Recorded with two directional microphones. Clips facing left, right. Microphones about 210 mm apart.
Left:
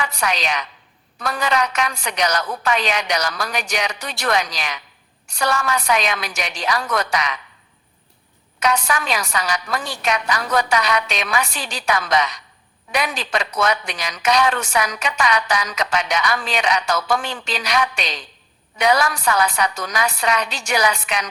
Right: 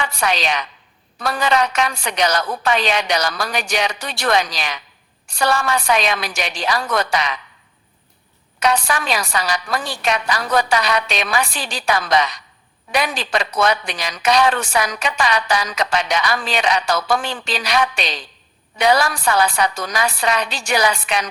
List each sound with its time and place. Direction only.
0.0 s a woman's voice: 30° right (ahead or behind)
8.5 s speech: 30° right (ahead or behind)